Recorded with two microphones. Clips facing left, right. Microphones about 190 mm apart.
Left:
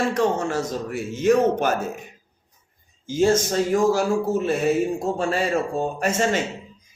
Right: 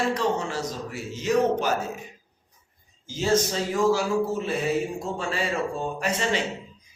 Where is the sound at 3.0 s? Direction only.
50° left (ahead or behind).